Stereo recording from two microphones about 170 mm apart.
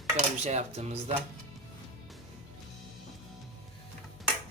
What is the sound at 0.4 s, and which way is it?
Speech, 40° right (ahead or behind).